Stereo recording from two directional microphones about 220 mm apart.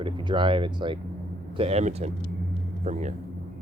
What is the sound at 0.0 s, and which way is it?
Speech, 20° right (ahead or behind).